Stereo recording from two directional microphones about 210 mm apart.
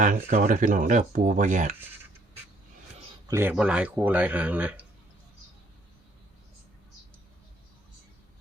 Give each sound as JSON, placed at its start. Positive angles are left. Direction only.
{"t": 0.0, "sound": "speech", "side_deg": -35}
{"t": 3.2, "sound": "speech", "side_deg": -10}